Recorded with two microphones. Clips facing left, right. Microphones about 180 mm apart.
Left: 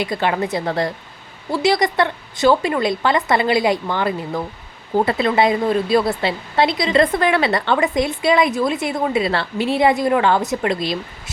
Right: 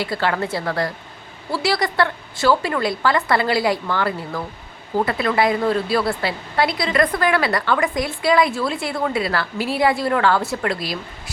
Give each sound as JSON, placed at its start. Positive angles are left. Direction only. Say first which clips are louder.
{"t": 0.0, "sound": "a woman's voice", "louder": "left 2 dB", "side_deg": 20}